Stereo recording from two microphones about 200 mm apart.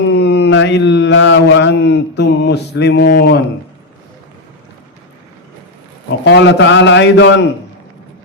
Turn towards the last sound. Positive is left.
turn(degrees=60)  # may be behind; listen again after turning